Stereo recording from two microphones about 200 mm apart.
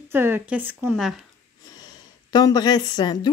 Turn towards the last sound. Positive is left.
turn(degrees=20)  # may be behind; listen again after turning